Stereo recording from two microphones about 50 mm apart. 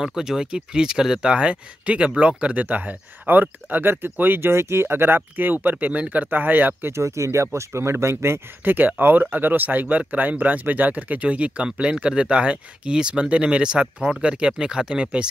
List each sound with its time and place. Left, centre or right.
0.0 s speech: centre
1.3 s speech: right
6.9 s speech: right
8.6 s speech: right; by 15.2 s centre